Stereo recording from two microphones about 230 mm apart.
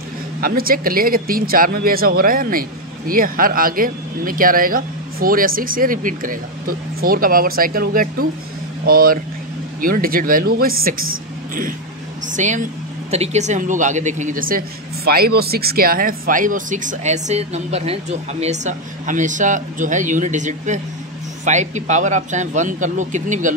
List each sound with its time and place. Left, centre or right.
0.4 s speech: right
12.4 s speech: right